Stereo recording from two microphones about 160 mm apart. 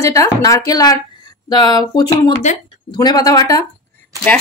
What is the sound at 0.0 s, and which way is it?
Speech, 20° left (ahead or behind).